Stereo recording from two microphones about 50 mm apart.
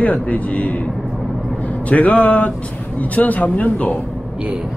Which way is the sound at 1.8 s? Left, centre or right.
Left.